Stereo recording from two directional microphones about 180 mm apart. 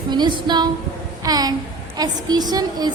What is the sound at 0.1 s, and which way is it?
A woman's voice, 25° right (ahead or behind).